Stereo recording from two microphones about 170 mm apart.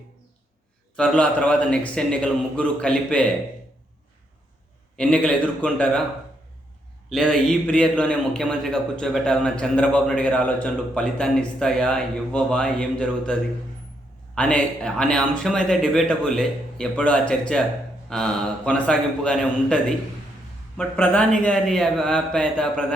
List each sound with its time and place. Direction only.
0.9 s a man's voice: 5° left (ahead or behind)
4.9 s a man's voice: 5° left (ahead or behind)
7.1 s a man's voice: 5° left (ahead or behind)
14.3 s a man's voice: 5° left (ahead or behind)